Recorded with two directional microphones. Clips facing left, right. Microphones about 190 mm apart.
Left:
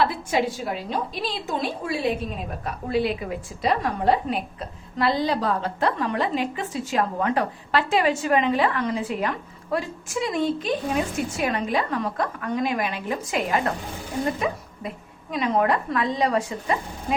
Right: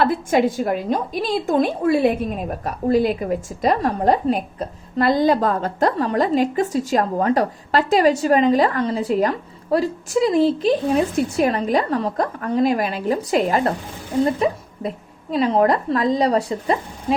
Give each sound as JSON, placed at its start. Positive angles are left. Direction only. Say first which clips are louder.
{"t": 0.0, "sound": "a woman's voice", "louder": "right 5 dB", "side_deg": -50}